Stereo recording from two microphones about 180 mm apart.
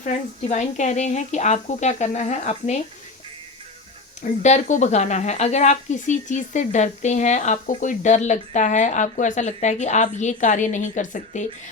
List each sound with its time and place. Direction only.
0.0 s speech: 45° left (ahead or behind)
4.2 s speech: 40° left (ahead or behind)